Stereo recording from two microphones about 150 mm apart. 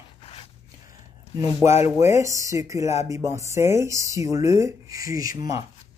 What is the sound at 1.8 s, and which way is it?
Speech, 50° left (ahead or behind).